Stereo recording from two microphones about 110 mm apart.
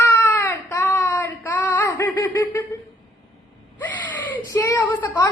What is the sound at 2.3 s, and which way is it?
Child singing, 25° left (ahead or behind).